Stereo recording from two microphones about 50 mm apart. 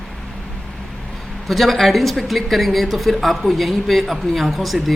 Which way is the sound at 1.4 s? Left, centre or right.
Centre.